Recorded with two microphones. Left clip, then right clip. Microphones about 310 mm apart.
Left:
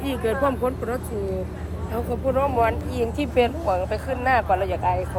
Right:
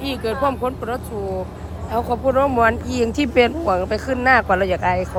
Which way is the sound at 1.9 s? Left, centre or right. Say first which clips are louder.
Right 6 dB; right.